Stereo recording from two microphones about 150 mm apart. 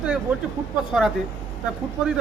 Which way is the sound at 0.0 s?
5° right (ahead or behind).